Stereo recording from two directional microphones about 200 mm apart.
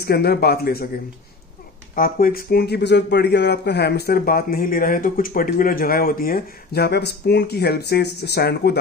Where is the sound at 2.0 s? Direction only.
45° left (ahead or behind).